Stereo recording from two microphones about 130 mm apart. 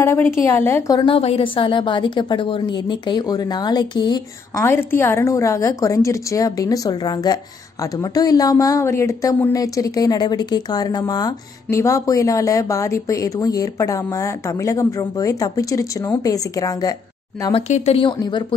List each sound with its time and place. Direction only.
0.0 s a woman's voice: 15° left (ahead or behind)
0.9 s a woman's voice: 45° left (ahead or behind)
4.6 s a woman's voice: 20° left (ahead or behind); by 17.6 s 35° left (ahead or behind)
17.6 s a woman's voice: 60° left (ahead or behind)
17.9 s a woman's voice: 35° left (ahead or behind)